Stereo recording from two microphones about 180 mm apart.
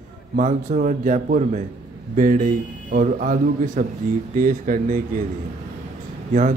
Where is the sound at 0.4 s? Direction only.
45° right (ahead or behind).